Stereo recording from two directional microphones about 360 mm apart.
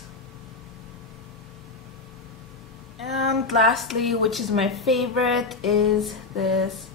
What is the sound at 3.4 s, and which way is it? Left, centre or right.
A woman's voice, centre.